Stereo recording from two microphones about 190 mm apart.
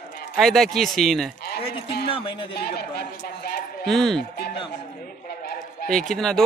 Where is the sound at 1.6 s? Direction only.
30° left (ahead or behind).